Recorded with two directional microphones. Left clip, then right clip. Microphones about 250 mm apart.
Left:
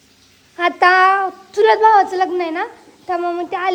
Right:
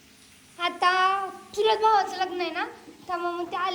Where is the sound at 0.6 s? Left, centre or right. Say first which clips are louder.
Left 11 dB; left.